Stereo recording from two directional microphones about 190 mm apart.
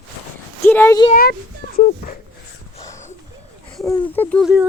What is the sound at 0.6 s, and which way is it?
Speech, 10° left (ahead or behind).